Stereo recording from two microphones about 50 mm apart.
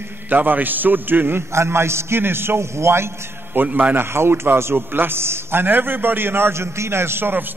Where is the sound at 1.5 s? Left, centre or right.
Right.